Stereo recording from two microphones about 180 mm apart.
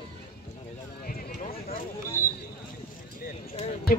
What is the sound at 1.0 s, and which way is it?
Clip-clop, 50° left (ahead or behind).